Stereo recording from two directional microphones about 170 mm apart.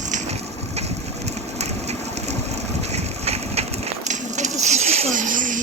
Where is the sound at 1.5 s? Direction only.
40° right (ahead or behind).